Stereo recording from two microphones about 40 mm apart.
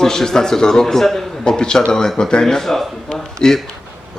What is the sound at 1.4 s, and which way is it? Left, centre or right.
Speech, centre.